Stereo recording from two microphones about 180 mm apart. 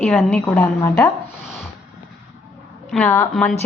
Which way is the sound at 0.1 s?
5° left (ahead or behind).